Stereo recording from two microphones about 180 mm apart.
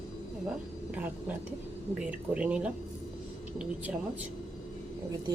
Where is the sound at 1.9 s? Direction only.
5° right (ahead or behind).